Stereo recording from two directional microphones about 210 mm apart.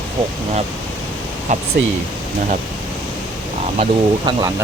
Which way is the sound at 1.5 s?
35° right (ahead or behind).